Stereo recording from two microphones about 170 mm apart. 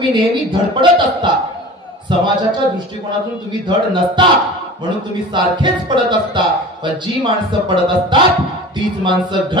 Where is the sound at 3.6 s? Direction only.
30° right (ahead or behind).